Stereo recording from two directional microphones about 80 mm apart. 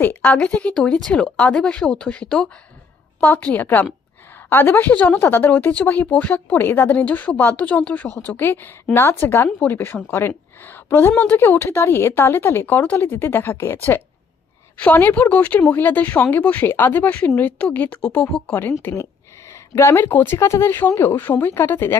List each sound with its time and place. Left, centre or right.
0.0 s a woman's voice: left
14.8 s a woman's voice: left
19.5 s a woman's voice: left